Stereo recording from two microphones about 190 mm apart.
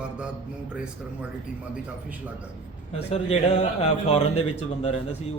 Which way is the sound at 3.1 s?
35° left (ahead or behind).